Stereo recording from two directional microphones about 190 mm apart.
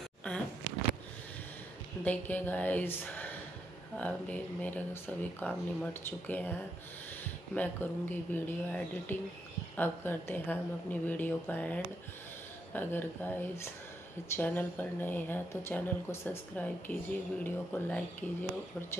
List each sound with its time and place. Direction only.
0.3 s a sound: 5° left (ahead or behind)
2.0 s speech: 10° left (ahead or behind)
7.5 s speech: 10° left (ahead or behind)